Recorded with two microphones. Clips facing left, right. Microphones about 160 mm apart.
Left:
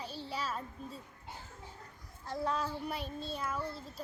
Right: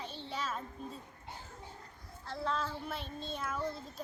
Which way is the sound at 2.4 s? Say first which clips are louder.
Left 1 dB; 15° left (ahead or behind).